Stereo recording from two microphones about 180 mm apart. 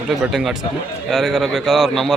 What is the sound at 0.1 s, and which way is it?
A man's voice, centre (ahead or behind).